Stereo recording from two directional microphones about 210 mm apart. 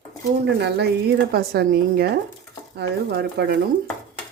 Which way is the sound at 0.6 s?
55° right (ahead or behind).